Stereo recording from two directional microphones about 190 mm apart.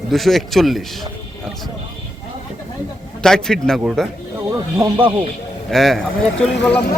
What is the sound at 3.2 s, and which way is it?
Speech, 5° left (ahead or behind).